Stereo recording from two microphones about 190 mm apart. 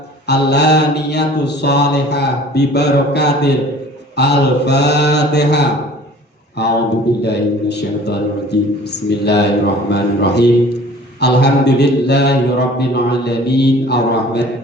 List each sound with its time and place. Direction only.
0.3 s mantra: 60° left (ahead or behind)